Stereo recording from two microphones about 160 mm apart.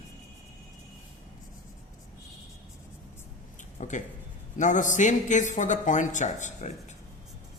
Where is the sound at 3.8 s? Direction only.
50° left (ahead or behind).